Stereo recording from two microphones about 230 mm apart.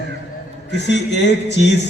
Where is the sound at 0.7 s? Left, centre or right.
Left.